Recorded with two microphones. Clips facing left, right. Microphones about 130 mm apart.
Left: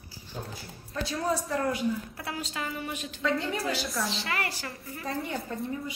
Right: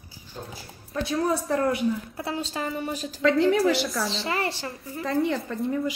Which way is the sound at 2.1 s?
30° right (ahead or behind).